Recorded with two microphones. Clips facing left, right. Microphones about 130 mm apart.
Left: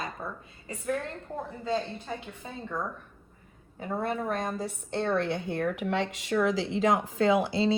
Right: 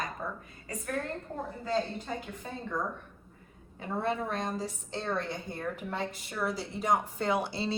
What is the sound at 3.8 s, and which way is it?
A woman's voice, 45° left (ahead or behind).